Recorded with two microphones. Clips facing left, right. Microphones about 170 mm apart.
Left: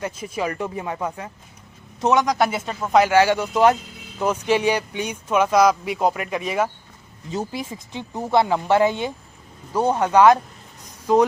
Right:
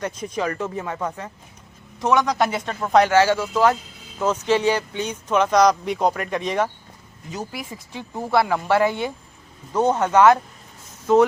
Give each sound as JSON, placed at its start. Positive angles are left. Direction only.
{"t": 0.0, "sound": "speech", "side_deg": 5}
{"t": 3.1, "sound": "speech", "side_deg": 15}
{"t": 7.3, "sound": "speech", "side_deg": 25}